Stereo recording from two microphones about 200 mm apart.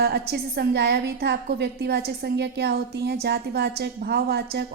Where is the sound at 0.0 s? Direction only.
55° right (ahead or behind).